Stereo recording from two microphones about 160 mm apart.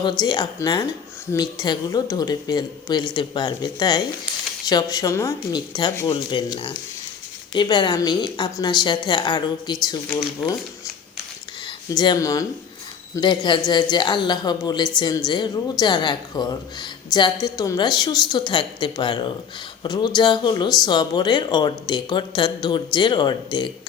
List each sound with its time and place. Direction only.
0.0 s speech: 25° left (ahead or behind)
11.6 s speech: 30° left (ahead or behind)